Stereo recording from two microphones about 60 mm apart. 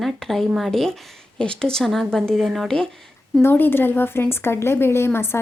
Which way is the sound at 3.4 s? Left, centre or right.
Left.